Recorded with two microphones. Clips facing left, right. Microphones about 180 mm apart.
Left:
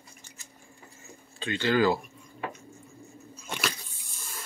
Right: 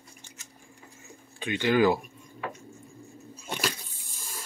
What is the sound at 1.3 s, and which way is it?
Speech, 15° right (ahead or behind).